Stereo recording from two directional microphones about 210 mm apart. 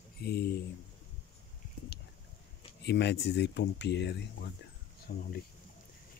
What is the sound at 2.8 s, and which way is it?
Speech, 50° left (ahead or behind).